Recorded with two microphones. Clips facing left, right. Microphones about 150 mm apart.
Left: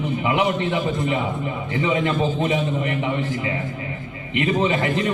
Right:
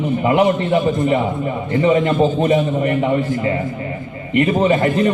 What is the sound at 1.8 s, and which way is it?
A man's voice, 50° right (ahead or behind).